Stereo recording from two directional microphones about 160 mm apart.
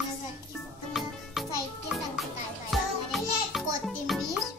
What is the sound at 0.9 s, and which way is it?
Music, centre (ahead or behind).